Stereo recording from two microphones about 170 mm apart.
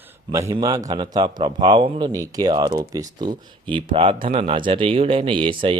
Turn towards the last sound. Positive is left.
turn(degrees=-30)  # may be behind; listen again after turning